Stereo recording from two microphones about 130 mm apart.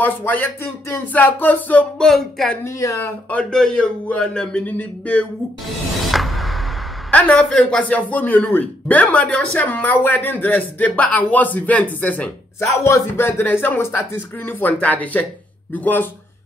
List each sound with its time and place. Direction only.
0.0 s speech: 15° left (ahead or behind)
2.6 s a woman's voice: 20° left (ahead or behind)
3.3 s speech: 10° left (ahead or behind)
6.0 s music: centre (ahead or behind)
7.1 s speech: 10° left (ahead or behind)
12.6 s speech: 20° left (ahead or behind)